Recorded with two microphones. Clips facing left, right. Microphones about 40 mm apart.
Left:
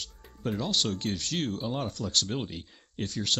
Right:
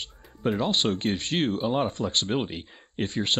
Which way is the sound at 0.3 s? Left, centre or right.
Right.